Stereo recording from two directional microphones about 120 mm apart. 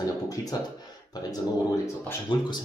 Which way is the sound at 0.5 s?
35° left (ahead or behind).